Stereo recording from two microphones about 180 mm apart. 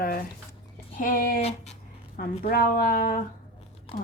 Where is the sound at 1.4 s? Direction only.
35° left (ahead or behind).